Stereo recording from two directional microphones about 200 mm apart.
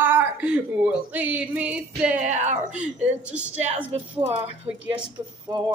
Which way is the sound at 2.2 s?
35° right (ahead or behind).